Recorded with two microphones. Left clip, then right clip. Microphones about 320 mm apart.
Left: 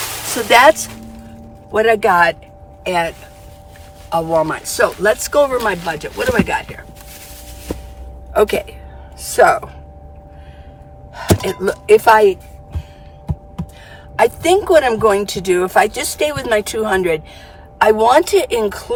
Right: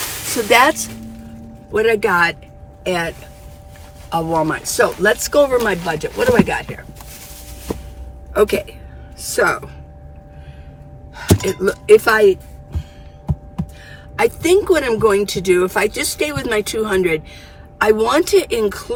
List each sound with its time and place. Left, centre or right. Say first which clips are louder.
0.4 s speech: left 4 dB; centre
7.7 s a sound: right 1 dB; centre
8.3 s speech: left 1 dB; centre
11.1 s speech: left 1 dB; centre
14.2 s speech: left 1 dB; centre